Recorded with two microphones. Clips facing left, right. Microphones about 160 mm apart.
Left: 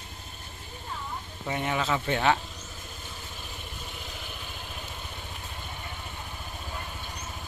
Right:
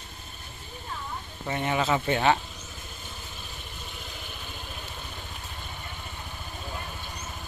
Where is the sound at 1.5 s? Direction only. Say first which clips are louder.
Right 2 dB; 5° left (ahead or behind).